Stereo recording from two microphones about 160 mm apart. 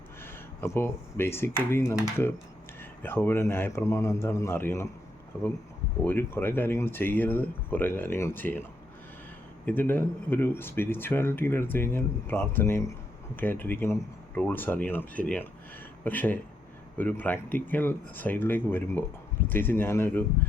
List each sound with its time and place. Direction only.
0.2 s speech: 15° left (ahead or behind)
9.6 s speech: 10° left (ahead or behind)